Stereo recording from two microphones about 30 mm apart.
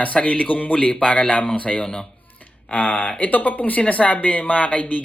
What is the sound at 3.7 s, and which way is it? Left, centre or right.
Speech, left.